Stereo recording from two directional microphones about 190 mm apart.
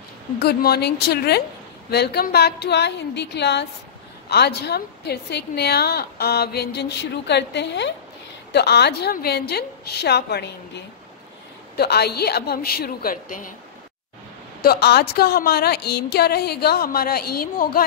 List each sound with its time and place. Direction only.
0.4 s a woman's voice: 55° left (ahead or behind)
14.6 s a woman's voice: 55° left (ahead or behind)